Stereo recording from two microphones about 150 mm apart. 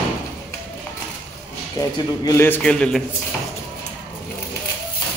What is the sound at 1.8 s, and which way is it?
A man's voice, 20° left (ahead or behind).